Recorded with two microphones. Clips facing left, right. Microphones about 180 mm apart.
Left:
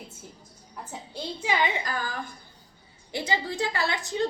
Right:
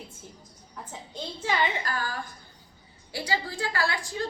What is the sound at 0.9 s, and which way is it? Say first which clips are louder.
A woman's voice: left 3 dB; 10° left (ahead or behind).